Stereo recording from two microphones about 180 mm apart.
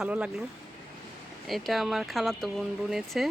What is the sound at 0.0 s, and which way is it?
Speech, 5° right (ahead or behind).